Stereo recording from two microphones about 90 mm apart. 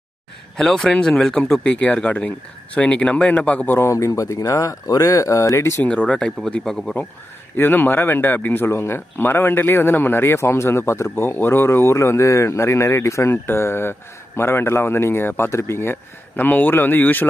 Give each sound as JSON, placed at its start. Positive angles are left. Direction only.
{"t": 0.6, "sound": "speech", "side_deg": 5}
{"t": 3.9, "sound": "speech", "side_deg": 35}
{"t": 5.9, "sound": "speech", "side_deg": 15}
{"t": 7.5, "sound": "speech", "side_deg": 20}